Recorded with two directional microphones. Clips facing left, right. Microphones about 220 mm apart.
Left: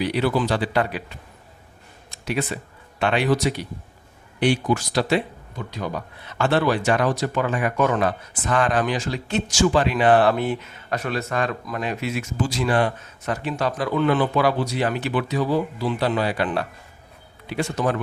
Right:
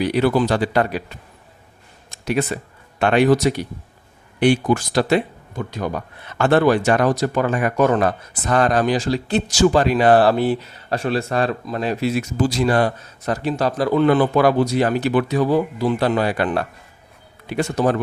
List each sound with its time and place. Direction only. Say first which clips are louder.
0.0 s speech: right 4 dB; 50° right (ahead or behind)
2.2 s speech: right 5 dB; 45° right (ahead or behind)
17.6 s speech: right 4 dB; 40° right (ahead or behind)